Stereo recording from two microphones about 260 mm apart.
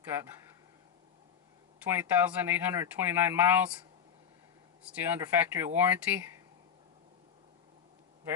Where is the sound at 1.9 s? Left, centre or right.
Centre.